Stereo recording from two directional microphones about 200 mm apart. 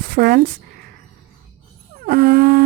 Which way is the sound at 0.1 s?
50° right (ahead or behind).